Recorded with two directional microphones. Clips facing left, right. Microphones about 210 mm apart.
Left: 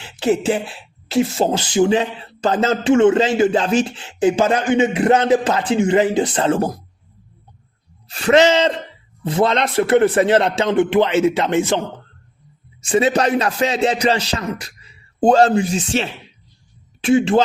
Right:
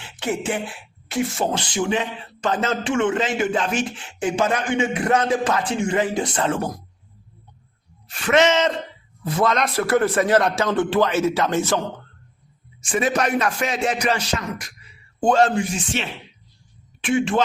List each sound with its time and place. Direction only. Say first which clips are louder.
0.0 s speech: left 8 dB; 25° left (ahead or behind)
8.1 s a man's voice: left 4 dB; 35° left (ahead or behind)
12.8 s speech: left 5 dB; 30° left (ahead or behind)